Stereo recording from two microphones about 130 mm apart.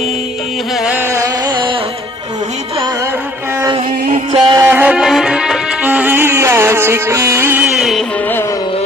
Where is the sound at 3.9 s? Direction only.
90° right.